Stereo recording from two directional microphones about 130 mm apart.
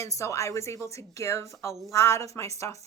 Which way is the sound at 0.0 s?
25° left (ahead or behind).